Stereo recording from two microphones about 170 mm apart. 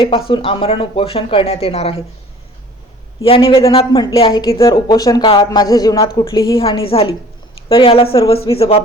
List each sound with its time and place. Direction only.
0.3 s speech: 30° left (ahead or behind)
3.2 s speech: 30° left (ahead or behind)